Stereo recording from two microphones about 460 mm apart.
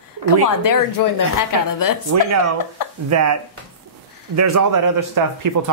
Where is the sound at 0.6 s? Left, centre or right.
Left.